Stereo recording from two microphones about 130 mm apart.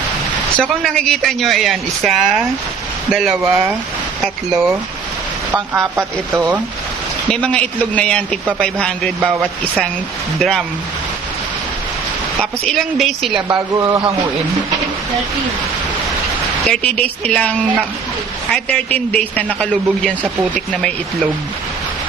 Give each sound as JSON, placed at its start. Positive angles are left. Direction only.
{"t": 0.6, "sound": "speech", "side_deg": 0}
{"t": 3.3, "sound": "speech", "side_deg": -10}
{"t": 7.3, "sound": "a man's voice", "side_deg": 10}
{"t": 10.3, "sound": "speech", "side_deg": 0}
{"t": 12.4, "sound": "speech", "side_deg": 5}
{"t": 13.5, "sound": "speech", "side_deg": -25}
{"t": 16.6, "sound": "a man's voice", "side_deg": 10}
{"t": 18.5, "sound": "a man's voice", "side_deg": 10}